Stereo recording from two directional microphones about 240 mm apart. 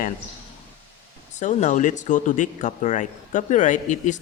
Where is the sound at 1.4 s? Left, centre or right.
Left.